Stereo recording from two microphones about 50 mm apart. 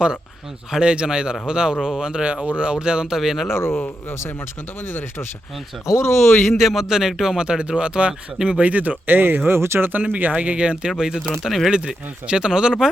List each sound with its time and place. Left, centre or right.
0.7 s speech: centre
3.5 s speech: left
5.8 s speech: left
6.6 s a man's voice: centre; by 9.6 s right
9.6 s speech: right
10.0 s a man's voice: right; by 11.2 s centre
11.4 s speech: centre
11.7 s speech: centre